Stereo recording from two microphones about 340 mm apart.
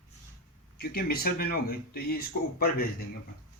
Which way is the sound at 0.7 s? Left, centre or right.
Left.